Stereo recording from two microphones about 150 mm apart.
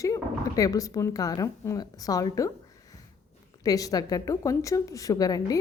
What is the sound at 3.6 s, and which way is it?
A woman's voice, 25° left (ahead or behind).